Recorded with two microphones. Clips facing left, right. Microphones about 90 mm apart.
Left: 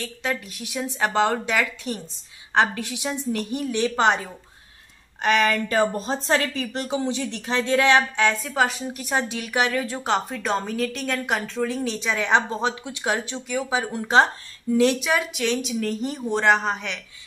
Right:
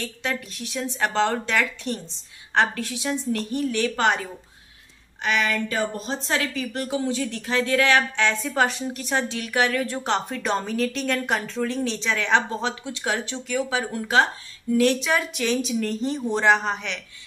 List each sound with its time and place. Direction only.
0.0 s a woman's voice: 10° left (ahead or behind)
5.2 s a woman's voice: 40° left (ahead or behind); by 8.3 s 20° left (ahead or behind)
8.3 s a woman's voice: 5° left (ahead or behind); by 15.0 s 20° left (ahead or behind)
15.0 s speech: centre (ahead or behind)